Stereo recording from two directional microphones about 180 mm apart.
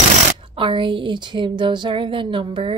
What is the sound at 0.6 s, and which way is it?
Speech, 30° right (ahead or behind).